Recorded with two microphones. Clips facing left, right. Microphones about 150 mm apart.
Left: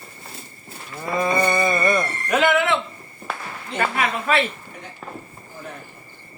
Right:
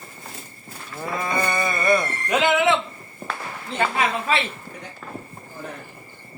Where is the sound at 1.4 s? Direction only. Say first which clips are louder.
Left 2 dB; 10° left (ahead or behind).